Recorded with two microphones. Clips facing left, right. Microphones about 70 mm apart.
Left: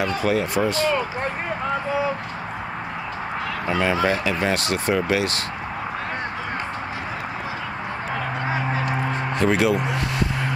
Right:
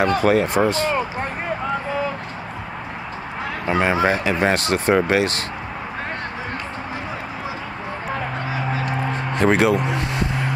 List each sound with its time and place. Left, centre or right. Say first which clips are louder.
0.0 s speech: right 5 dB; right
3.6 s speech: right 3 dB; right
9.4 s speech: right 3 dB; right